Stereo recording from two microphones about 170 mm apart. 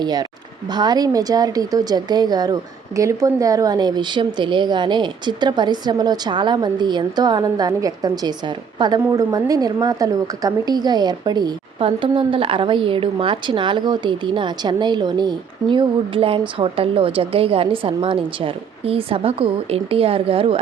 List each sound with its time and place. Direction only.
0.0 s a woman's voice: 25° right (ahead or behind)